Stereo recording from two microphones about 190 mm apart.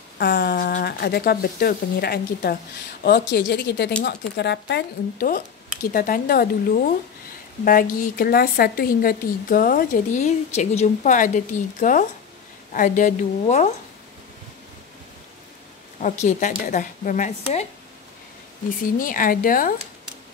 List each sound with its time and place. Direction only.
0.2 s a woman's voice: 50° left (ahead or behind)
16.0 s a woman's voice: 40° left (ahead or behind)
18.9 s a woman's voice: 45° left (ahead or behind)